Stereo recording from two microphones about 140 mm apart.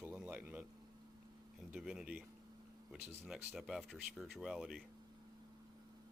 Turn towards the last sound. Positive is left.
turn(degrees=0)  # may be behind; listen again after turning